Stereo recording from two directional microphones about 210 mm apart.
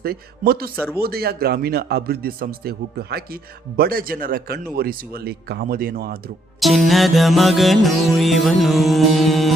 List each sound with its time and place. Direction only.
0.0 s speech: 45° right (ahead or behind)
6.6 s music: centre (ahead or behind)